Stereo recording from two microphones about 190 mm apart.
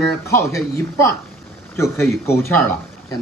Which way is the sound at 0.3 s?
15° left (ahead or behind).